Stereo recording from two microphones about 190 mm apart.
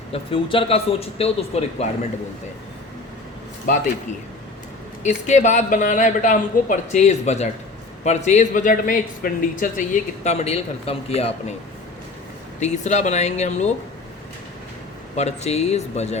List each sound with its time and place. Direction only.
0.1 s speech: 30° left (ahead or behind)
5.0 s speech: 40° left (ahead or behind)
12.5 s speech: 35° left (ahead or behind)
15.1 s speech: 35° left (ahead or behind)